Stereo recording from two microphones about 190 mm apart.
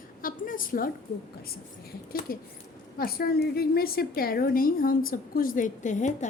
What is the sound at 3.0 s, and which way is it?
A woman's voice, 50° left (ahead or behind).